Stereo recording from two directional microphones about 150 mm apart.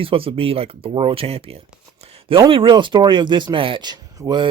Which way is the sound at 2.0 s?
40° right (ahead or behind).